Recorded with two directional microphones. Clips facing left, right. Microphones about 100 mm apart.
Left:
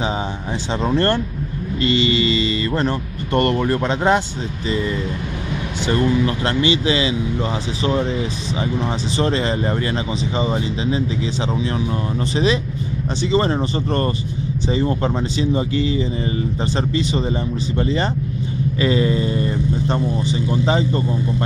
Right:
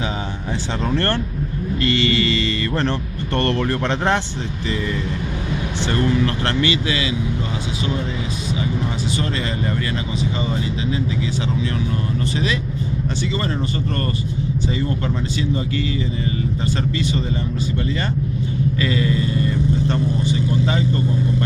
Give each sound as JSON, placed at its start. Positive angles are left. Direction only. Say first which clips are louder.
{"t": 0.7, "sound": "speech", "louder": "left 4 dB", "side_deg": 25}
{"t": 4.6, "sound": "speech", "louder": "left 3 dB", "side_deg": 20}
{"t": 9.1, "sound": "speech", "louder": "left 4 dB", "side_deg": 30}
{"t": 13.2, "sound": "speech", "louder": "left 9 dB", "side_deg": 25}